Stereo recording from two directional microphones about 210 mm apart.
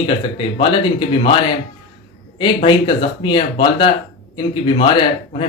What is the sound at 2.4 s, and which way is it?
Speech, 25° left (ahead or behind).